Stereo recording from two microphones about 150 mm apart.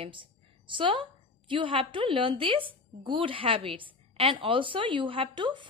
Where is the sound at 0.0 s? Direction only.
35° right (ahead or behind).